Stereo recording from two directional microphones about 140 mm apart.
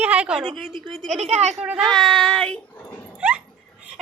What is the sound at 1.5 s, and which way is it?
Speech, centre (ahead or behind).